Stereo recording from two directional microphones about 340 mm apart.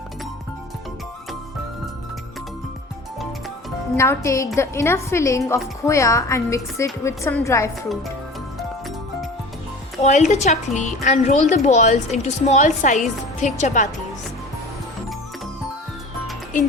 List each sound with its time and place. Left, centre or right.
3.9 s a woman's voice: centre
10.0 s a woman's voice: left